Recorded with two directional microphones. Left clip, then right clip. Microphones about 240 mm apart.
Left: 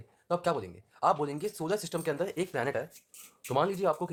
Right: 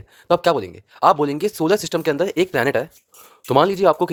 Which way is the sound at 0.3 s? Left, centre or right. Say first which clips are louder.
Right 13 dB; right.